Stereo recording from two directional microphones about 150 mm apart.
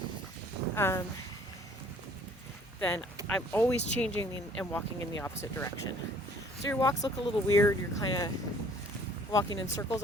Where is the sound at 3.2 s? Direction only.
10° left (ahead or behind).